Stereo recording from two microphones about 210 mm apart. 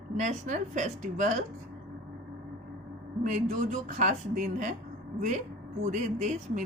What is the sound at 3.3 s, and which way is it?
A woman's voice, 35° right (ahead or behind).